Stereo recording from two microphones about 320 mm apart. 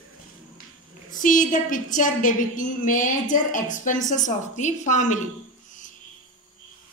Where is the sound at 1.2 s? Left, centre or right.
Left.